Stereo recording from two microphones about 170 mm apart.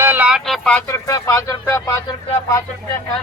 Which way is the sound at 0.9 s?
20° left (ahead or behind).